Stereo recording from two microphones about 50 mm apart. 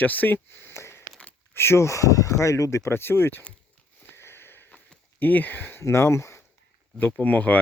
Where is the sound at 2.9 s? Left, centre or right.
Left.